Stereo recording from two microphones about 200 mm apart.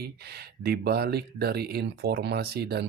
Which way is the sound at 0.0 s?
50° right (ahead or behind).